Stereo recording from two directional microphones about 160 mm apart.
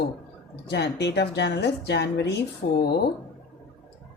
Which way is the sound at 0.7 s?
90° left.